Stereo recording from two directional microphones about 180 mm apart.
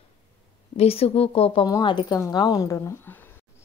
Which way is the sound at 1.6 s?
20° left (ahead or behind).